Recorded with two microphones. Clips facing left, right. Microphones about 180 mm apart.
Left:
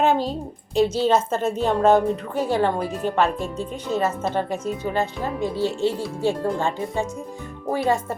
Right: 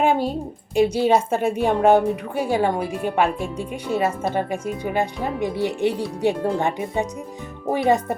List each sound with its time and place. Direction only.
0.0 s a woman's voice: 10° right (ahead or behind)